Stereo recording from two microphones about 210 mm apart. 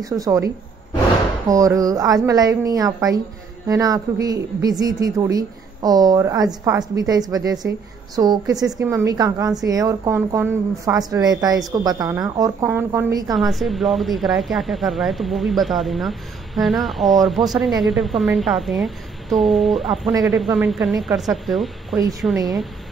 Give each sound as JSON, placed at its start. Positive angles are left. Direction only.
{"t": 0.0, "sound": "a woman's voice", "side_deg": -15}
{"t": 1.5, "sound": "a woman's voice", "side_deg": -15}
{"t": 13.3, "sound": "a woman's voice", "side_deg": 0}